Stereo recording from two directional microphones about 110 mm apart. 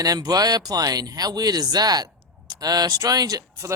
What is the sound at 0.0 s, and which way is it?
Speech, 35° right (ahead or behind).